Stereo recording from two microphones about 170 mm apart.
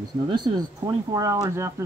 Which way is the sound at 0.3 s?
25° right (ahead or behind).